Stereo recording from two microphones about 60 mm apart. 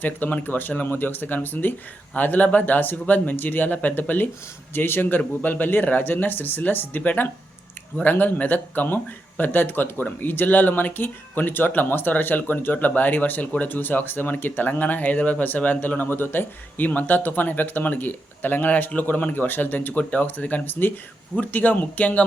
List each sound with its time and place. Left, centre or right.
0.0 s speech: left